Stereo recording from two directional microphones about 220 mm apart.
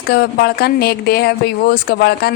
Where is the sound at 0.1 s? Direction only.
45° left (ahead or behind).